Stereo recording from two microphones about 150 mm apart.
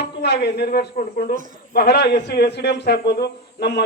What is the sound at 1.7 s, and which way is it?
Speech, 90° left.